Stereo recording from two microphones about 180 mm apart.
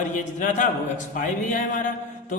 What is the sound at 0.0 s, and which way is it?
A man's voice, 45° left (ahead or behind).